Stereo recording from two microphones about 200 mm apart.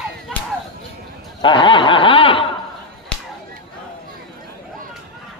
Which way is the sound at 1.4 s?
25° left (ahead or behind).